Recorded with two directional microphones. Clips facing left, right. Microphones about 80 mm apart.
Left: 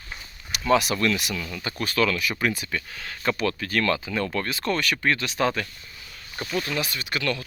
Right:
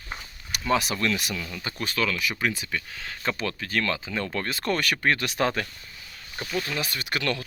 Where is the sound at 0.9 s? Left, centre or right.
Centre.